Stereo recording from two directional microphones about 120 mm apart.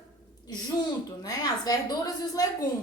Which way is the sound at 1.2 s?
30° left (ahead or behind).